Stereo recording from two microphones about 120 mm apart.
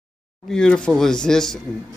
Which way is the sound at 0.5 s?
5° left (ahead or behind).